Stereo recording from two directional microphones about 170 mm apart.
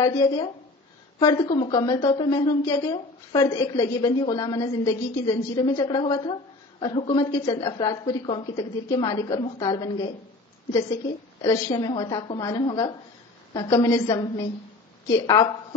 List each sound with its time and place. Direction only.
0.0 s a woman's voice: 20° left (ahead or behind)
11.4 s a woman's voice: 25° left (ahead or behind)